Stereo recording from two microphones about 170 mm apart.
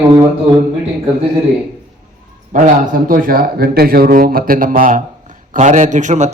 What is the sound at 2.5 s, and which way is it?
A man's voice, 50° right (ahead or behind).